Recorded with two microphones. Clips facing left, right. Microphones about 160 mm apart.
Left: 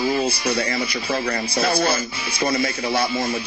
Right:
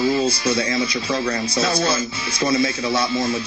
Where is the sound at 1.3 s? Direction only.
55° left (ahead or behind).